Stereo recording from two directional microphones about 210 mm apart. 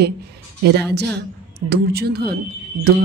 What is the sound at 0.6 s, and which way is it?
Speech, 50° right (ahead or behind).